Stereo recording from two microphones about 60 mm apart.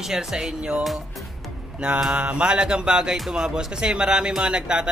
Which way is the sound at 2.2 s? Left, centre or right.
Centre.